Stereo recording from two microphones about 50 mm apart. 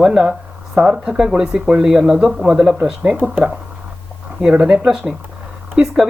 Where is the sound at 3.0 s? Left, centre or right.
Right.